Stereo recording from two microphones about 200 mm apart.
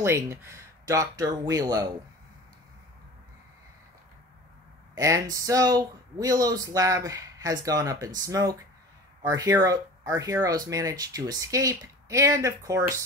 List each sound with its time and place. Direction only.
0.0 s speech: 15° right (ahead or behind)
4.9 s speech: 15° right (ahead or behind)